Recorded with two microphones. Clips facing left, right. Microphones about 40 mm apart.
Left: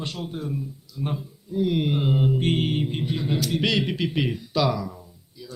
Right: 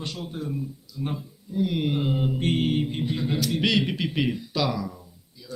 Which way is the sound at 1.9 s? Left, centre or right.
Centre.